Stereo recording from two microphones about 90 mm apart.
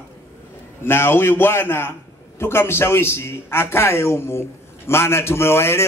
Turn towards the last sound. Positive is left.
turn(degrees=30)  # may be behind; listen again after turning